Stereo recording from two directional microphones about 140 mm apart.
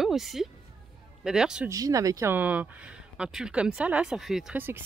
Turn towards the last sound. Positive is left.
turn(degrees=-5)  # may be behind; listen again after turning